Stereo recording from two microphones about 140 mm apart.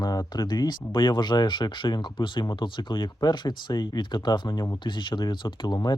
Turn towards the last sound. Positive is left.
turn(degrees=30)  # may be behind; listen again after turning